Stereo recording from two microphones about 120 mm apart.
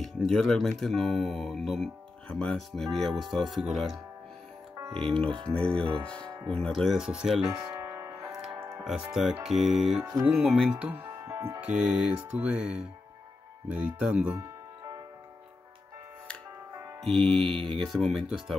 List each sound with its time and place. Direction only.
0.0 s speech: 5° left (ahead or behind)
4.9 s speech: 50° right (ahead or behind)
5.5 s speech: 10° left (ahead or behind)
7.4 s music: 25° right (ahead or behind)
8.3 s music: 5° right (ahead or behind)
8.5 s music: 25° right (ahead or behind)
9.1 s speech: 5° right (ahead or behind)
10.4 s music: 5° right (ahead or behind)
11.1 s music: 25° right (ahead or behind)
11.6 s music: 10° right (ahead or behind)
17.0 s speech: 5° left (ahead or behind)